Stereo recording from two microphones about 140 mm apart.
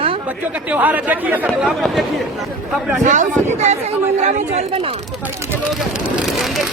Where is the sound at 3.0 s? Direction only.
60° right (ahead or behind).